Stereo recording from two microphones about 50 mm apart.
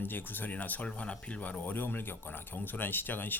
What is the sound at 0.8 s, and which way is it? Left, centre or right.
Speech, left.